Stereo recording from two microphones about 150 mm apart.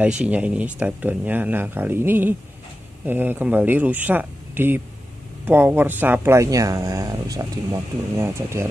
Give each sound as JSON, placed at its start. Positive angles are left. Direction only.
{"t": 0.0, "sound": "speech", "side_deg": -10}